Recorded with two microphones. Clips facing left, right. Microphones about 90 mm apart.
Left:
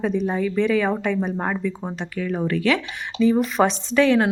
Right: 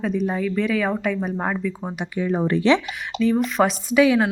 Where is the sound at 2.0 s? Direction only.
25° right (ahead or behind).